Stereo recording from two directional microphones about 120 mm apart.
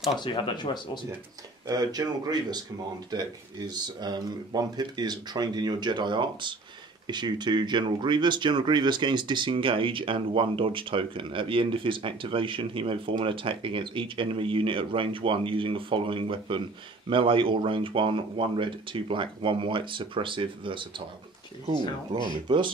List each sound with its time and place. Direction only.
0.2 s speech: 40° left (ahead or behind)
1.7 s speech: 35° right (ahead or behind)
22.1 s speech: 40° right (ahead or behind)